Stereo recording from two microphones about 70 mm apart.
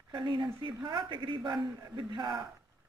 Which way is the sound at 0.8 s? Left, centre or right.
Right.